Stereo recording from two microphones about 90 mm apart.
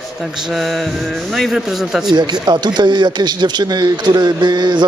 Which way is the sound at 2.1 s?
55° right (ahead or behind).